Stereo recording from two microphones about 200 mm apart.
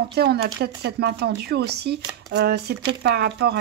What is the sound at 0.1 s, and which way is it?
A woman's voice, 55° right (ahead or behind).